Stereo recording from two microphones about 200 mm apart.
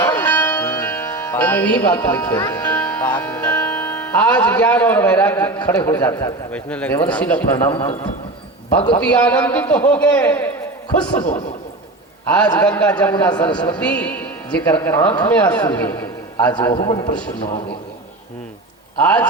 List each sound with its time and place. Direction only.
0.2 s music: 10° left (ahead or behind)
2.4 s speech: 20° left (ahead or behind)
2.7 s music: 5° left (ahead or behind)
3.4 s speech: 5° left (ahead or behind)
9.0 s speech: 5° left (ahead or behind)
11.2 s a man's voice: 35° left (ahead or behind)
12.5 s speech: 10° left (ahead or behind)
16.6 s a man's voice: 20° left (ahead or behind)
18.9 s speech: 5° left (ahead or behind)